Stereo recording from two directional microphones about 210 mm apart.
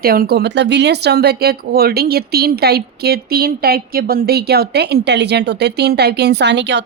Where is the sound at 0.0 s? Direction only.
45° right (ahead or behind).